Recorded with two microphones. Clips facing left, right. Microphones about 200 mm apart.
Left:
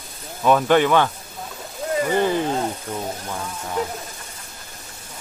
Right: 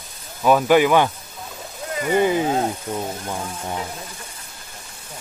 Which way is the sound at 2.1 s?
10° right (ahead or behind).